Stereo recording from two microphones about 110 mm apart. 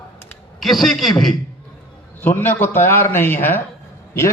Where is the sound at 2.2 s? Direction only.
20° left (ahead or behind).